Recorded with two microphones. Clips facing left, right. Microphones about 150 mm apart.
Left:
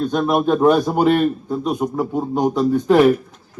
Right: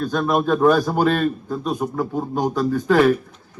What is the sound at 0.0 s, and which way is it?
A man's voice, 20° left (ahead or behind).